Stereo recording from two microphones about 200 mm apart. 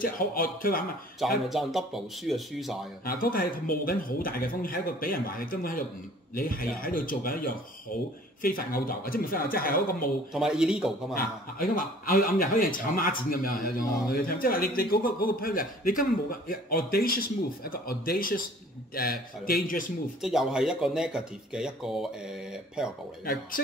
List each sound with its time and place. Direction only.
0.0 s a man's voice: 45° left (ahead or behind)
1.5 s speech: centre (ahead or behind)
3.1 s a man's voice: 45° left (ahead or behind)
10.3 s speech: 5° right (ahead or behind)
11.7 s a man's voice: 45° left (ahead or behind)
20.2 s speech: centre (ahead or behind)